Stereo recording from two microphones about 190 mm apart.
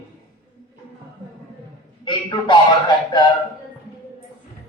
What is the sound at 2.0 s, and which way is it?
A man's voice, 25° left (ahead or behind).